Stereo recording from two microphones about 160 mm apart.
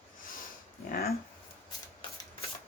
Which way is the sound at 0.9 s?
75° left (ahead or behind).